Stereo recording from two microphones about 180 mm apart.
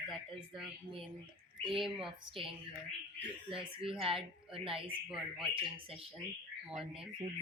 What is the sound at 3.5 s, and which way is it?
Speech, 30° right (ahead or behind).